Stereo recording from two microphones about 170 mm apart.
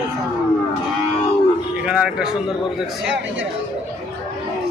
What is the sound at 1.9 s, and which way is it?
Speech, 5° right (ahead or behind).